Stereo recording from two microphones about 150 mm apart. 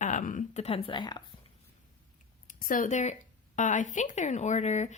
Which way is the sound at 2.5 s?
65° left (ahead or behind).